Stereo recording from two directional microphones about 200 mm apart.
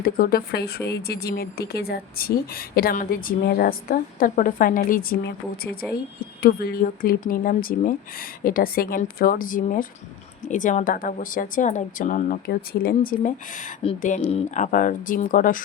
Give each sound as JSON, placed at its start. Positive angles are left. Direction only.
{"t": 0.0, "sound": "speech", "side_deg": 50}
{"t": 6.4, "sound": "a woman's voice", "side_deg": 50}